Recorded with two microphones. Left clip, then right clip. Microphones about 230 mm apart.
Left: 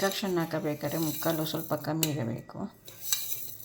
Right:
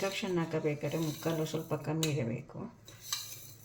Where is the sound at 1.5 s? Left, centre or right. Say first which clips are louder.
Left 4 dB; centre.